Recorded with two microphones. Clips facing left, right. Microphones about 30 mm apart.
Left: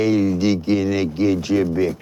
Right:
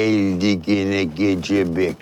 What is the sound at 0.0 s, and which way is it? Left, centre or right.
Speech, centre.